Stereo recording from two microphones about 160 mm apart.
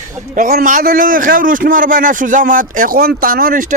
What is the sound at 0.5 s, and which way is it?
A man's voice, 60° right (ahead or behind).